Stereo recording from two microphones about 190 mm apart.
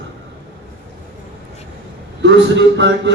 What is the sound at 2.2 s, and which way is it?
Speech, 65° right (ahead or behind).